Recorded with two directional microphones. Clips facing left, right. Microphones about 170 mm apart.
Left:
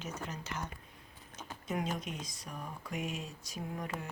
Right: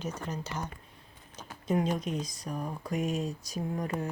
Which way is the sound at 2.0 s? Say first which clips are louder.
Right 8 dB; 35° right (ahead or behind).